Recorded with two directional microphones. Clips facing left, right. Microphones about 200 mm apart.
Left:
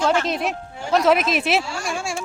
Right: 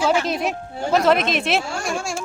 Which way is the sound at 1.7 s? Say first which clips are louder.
Right 2 dB; 50° right (ahead or behind).